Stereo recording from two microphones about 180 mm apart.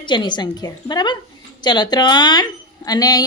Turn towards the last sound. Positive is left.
turn(degrees=20)  # may be behind; listen again after turning